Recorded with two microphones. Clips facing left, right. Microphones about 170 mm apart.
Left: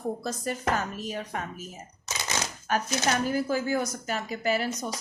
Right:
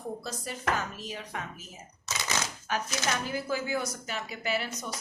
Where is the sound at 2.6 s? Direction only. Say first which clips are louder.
Left 6 dB; 45° left (ahead or behind).